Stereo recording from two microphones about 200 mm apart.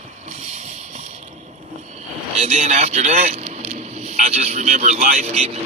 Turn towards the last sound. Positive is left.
turn(degrees=-30)  # may be behind; listen again after turning